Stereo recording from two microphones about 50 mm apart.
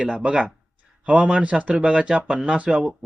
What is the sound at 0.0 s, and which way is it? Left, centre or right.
Speech, right.